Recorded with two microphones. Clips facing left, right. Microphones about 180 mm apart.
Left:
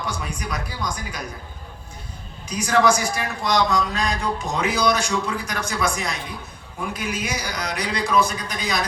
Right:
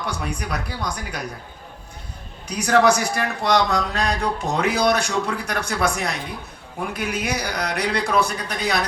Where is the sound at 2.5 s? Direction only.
65° right (ahead or behind).